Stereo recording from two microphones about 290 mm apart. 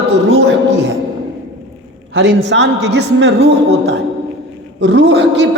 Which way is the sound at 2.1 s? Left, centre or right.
Right.